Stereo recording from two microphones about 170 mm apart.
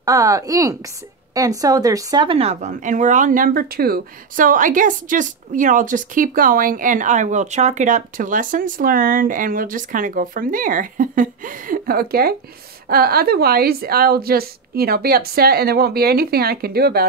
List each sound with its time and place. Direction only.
0.0 s a woman's voice: 20° right (ahead or behind); by 17.0 s 65° right (ahead or behind)